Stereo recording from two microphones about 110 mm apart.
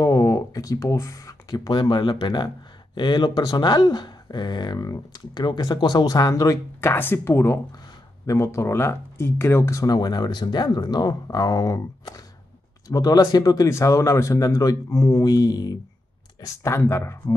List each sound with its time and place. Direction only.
0.0 s speech: 30° left (ahead or behind)
1.7 s a man's voice: 45° left (ahead or behind); by 17.4 s 25° left (ahead or behind)